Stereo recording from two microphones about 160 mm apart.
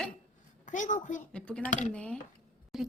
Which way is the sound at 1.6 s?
50° left (ahead or behind).